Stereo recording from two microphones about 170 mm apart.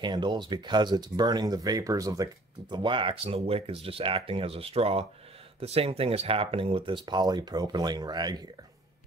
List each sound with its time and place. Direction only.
0.0 s speech: 25° right (ahead or behind)